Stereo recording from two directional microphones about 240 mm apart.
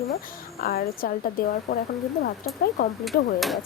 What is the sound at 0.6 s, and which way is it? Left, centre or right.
Speech, left.